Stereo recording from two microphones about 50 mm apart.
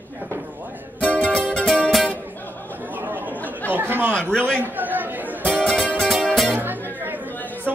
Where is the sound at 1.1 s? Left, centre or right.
Left.